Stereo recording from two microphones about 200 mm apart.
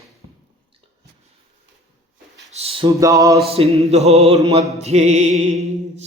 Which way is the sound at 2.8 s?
15° right (ahead or behind).